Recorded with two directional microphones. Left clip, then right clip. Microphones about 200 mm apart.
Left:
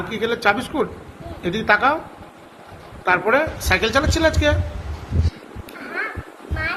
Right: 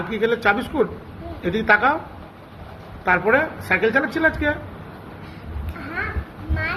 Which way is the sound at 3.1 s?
20° left (ahead or behind).